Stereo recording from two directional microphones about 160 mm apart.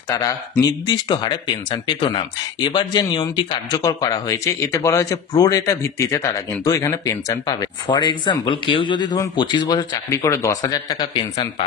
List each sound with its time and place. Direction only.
0.1 s speech: 20° left (ahead or behind)